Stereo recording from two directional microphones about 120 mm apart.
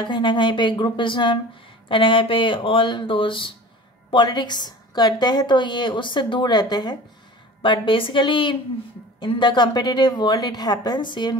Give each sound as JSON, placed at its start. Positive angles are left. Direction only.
{"t": 0.0, "sound": "a woman's voice", "side_deg": 40}
{"t": 7.6, "sound": "a woman's voice", "side_deg": 45}